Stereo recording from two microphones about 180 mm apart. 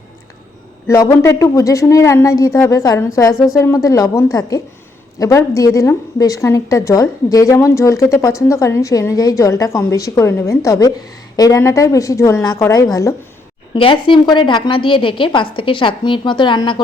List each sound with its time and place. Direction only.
0.9 s a woman's voice: 15° left (ahead or behind)
13.7 s a woman's voice: 30° left (ahead or behind)